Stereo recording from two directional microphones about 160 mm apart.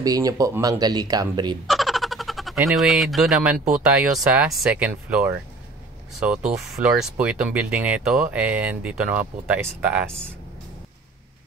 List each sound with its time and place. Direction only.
0.0 s speech: 20° right (ahead or behind)
1.7 s a sound: centre (ahead or behind)
3.8 s speech: 5° right (ahead or behind)